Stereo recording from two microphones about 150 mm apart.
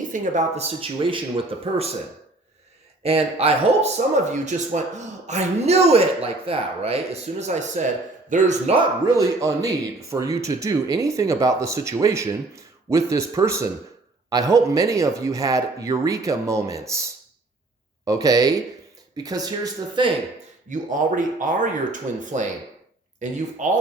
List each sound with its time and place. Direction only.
0.1 s a woman's voice: 50° right (ahead or behind)
0.8 s speech: 35° right (ahead or behind)
3.0 s a woman's voice: 40° right (ahead or behind)
9.1 s speech: 25° right (ahead or behind)
18.0 s speech: 25° right (ahead or behind)
20.7 s speech: 60° right (ahead or behind)